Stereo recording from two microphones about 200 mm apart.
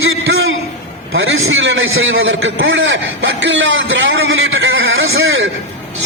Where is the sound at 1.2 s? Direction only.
80° right.